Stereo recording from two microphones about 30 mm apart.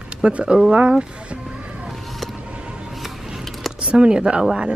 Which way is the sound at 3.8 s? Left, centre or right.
Right.